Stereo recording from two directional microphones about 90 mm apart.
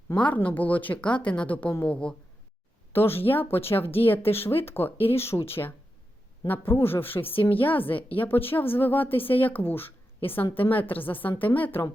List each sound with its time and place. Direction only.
0.2 s a woman's voice: 15° left (ahead or behind)
2.9 s a woman's voice: 25° left (ahead or behind)